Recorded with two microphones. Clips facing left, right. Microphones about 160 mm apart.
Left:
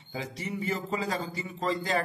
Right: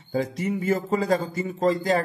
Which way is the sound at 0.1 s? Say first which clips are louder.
Right 10 dB; 50° right (ahead or behind).